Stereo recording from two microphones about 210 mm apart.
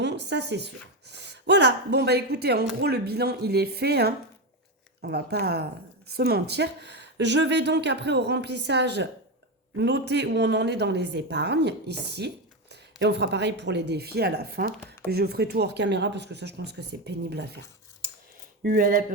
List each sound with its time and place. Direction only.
0.0 s speech: 55° right (ahead or behind)
18.7 s speech: 40° right (ahead or behind)